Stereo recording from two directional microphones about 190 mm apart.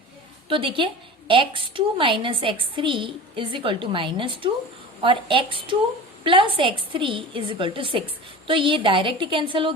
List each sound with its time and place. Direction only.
0.4 s a woman's voice: 25° right (ahead or behind)